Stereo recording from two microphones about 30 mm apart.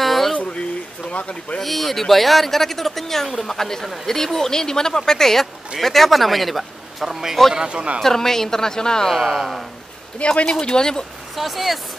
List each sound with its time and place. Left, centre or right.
0.0 s a sound: centre
0.4 s a sound: left
1.6 s speech: centre
7.1 s speech: centre
7.6 s speech: right
8.0 s speech: centre
9.1 s speech: centre
10.2 s speech: left
10.5 s speech: left
11.3 s speech: centre